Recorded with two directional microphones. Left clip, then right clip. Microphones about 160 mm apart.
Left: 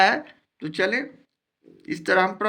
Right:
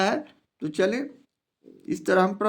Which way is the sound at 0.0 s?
40° right (ahead or behind).